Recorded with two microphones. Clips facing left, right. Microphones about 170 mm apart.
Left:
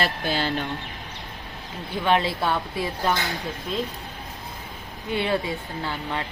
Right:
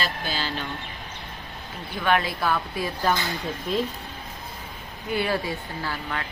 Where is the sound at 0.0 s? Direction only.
60° left (ahead or behind).